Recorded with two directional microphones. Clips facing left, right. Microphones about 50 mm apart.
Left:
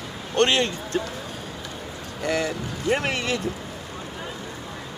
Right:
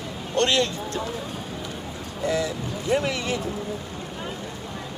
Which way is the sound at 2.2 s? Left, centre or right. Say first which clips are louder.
Even; left.